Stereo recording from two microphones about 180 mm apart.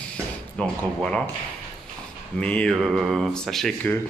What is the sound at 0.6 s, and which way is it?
Speech, 5° left (ahead or behind).